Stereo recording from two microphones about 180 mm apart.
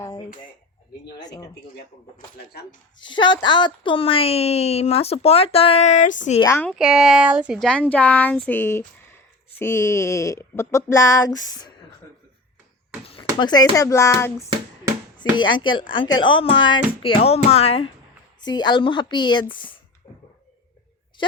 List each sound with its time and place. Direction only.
1.2 s speech: 20° left (ahead or behind)
2.1 s speech: 55° left (ahead or behind)
3.0 s a woman's voice: 25° left (ahead or behind); by 6.4 s 45° left (ahead or behind)
6.4 s speech: 15° left (ahead or behind)
6.7 s speech: 5° right (ahead or behind); by 11.7 s 20° left (ahead or behind)
13.4 s speech: 20° left (ahead or behind)
15.2 s speech: 25° left (ahead or behind)
18.3 s speech: 25° left (ahead or behind)